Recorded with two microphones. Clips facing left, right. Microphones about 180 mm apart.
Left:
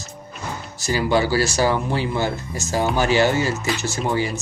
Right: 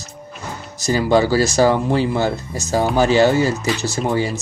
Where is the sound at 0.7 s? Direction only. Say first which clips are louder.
Right 4 dB; 40° right (ahead or behind).